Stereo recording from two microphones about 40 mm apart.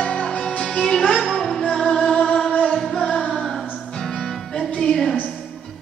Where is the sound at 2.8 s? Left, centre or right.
Centre.